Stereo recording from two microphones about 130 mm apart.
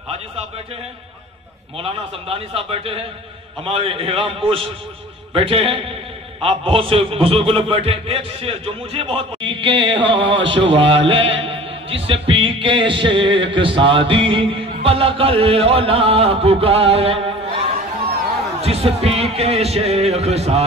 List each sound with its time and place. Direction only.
1.8 s a man's voice: 45° right (ahead or behind)